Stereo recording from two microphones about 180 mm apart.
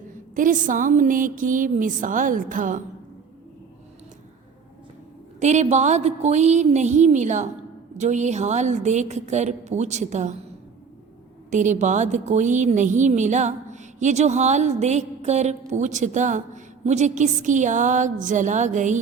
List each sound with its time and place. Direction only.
0.3 s speech: 45° right (ahead or behind)
5.4 s a woman's voice: 40° right (ahead or behind)
11.5 s a woman's voice: 45° right (ahead or behind)